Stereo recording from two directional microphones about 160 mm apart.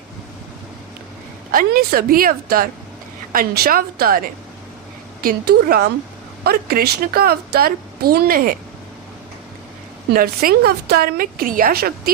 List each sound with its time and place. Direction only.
1.5 s a woman's voice: 65° right (ahead or behind)
5.2 s a woman's voice: 70° right (ahead or behind)
10.1 s a woman's voice: 70° right (ahead or behind)